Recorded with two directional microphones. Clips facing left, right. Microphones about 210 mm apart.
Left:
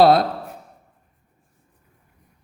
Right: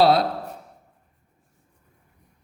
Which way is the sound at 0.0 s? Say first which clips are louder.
Left 3 dB; 50° left (ahead or behind).